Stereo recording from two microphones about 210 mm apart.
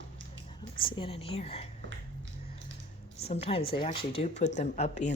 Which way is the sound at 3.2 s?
30° left (ahead or behind).